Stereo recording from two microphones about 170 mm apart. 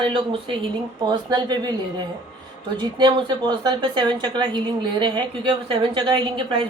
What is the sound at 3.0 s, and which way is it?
A woman's voice, 30° right (ahead or behind).